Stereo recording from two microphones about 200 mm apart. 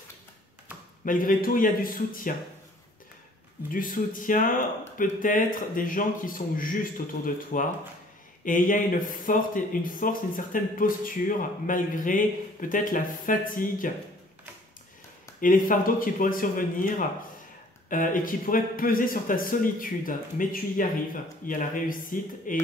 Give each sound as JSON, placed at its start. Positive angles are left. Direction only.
{"t": 1.0, "sound": "speech", "side_deg": 45}
{"t": 3.7, "sound": "speech", "side_deg": 45}
{"t": 15.4, "sound": "speech", "side_deg": 45}